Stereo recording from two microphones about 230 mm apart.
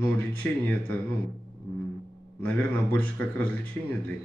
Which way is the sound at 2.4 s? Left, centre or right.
Centre.